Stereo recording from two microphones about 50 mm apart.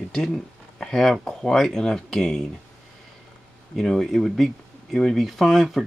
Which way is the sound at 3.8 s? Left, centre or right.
Centre.